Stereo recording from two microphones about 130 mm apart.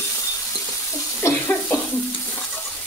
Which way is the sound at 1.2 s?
20° left (ahead or behind).